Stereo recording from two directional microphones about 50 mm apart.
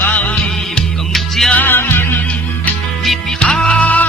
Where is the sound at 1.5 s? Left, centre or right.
Left.